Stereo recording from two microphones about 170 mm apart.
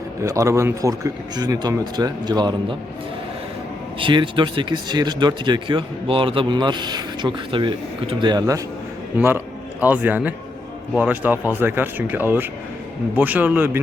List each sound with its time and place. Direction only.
0.2 s speech: 20° right (ahead or behind)
4.0 s speech: 30° right (ahead or behind); by 13.7 s 10° right (ahead or behind)